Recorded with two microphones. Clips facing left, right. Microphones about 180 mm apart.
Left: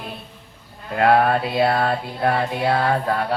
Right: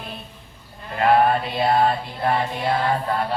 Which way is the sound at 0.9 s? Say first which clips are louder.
Left 1 dB; 70° left (ahead or behind).